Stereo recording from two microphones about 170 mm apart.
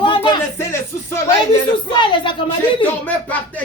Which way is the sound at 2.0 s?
30° left (ahead or behind).